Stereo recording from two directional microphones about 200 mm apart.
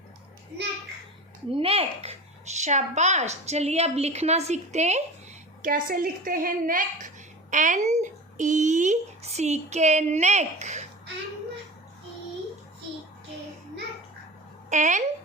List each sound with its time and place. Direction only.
1.5 s speech: 30° right (ahead or behind)
5.6 s a woman's voice: 45° right (ahead or behind)
14.7 s speech: 35° right (ahead or behind)